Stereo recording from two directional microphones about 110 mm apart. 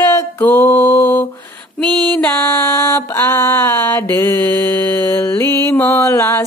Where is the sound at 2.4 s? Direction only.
25° left (ahead or behind).